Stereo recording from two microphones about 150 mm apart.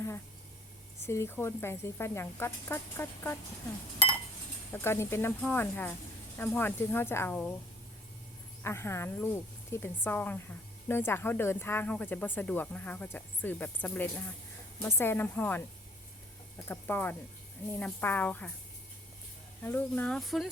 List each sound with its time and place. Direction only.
1.0 s speech: 15° left (ahead or behind)
4.7 s speech: 15° left (ahead or behind)
8.6 s speech: 15° left (ahead or behind)
16.6 s speech: 15° left (ahead or behind)
19.6 s speech: 10° left (ahead or behind)